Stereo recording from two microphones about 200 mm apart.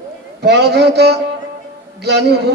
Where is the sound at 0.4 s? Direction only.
55° right (ahead or behind).